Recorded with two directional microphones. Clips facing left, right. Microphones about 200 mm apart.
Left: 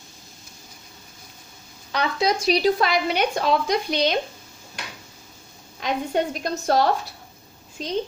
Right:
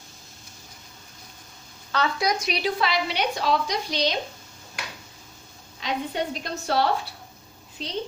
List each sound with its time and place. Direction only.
1.9 s speech: 15° left (ahead or behind)
2.2 s a woman's voice: 30° left (ahead or behind); by 4.2 s 55° left (ahead or behind)
5.8 s a woman's voice: 45° left (ahead or behind)